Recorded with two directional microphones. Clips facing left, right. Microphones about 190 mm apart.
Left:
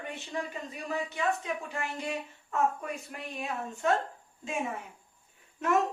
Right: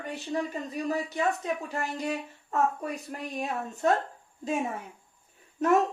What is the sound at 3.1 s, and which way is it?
Speech, 40° right (ahead or behind).